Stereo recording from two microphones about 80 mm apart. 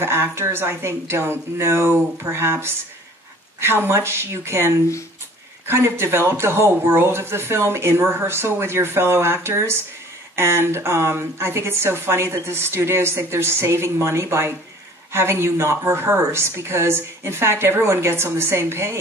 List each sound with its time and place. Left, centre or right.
0.0 s speech: right